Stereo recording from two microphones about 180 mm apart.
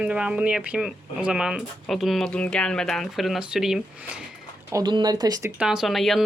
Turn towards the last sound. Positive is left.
turn(degrees=0)  # may be behind; listen again after turning